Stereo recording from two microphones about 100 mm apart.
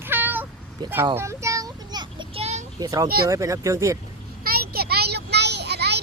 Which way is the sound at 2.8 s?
35° right (ahead or behind).